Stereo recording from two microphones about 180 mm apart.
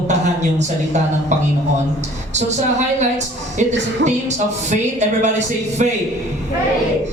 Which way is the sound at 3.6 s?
40° right (ahead or behind).